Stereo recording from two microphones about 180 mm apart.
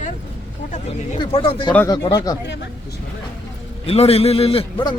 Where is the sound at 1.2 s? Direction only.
30° left (ahead or behind).